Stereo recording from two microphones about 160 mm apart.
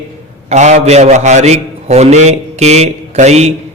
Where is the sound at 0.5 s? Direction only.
45° right (ahead or behind).